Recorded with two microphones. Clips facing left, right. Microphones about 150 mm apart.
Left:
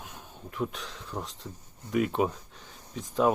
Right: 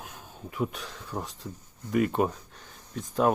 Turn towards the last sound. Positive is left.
turn(degrees=0)  # may be behind; listen again after turning